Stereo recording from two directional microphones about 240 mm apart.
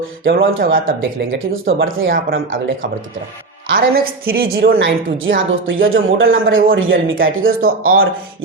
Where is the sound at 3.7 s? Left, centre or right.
Right.